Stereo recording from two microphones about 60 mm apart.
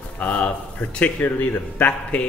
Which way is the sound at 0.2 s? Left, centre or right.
Left.